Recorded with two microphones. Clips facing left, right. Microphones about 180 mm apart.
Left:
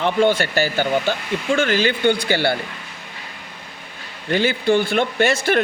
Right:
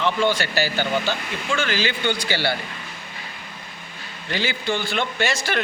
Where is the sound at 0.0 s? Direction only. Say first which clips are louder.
Left 4 dB; 55° left (ahead or behind).